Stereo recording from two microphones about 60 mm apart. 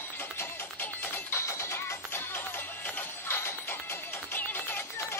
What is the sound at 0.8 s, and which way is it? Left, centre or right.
Music, left.